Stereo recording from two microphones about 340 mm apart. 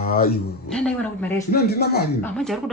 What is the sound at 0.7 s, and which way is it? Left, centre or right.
Speech, centre.